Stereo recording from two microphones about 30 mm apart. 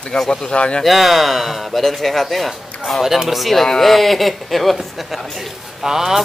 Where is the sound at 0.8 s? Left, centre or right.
Centre.